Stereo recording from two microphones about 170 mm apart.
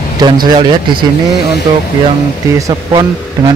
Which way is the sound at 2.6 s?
25° right (ahead or behind).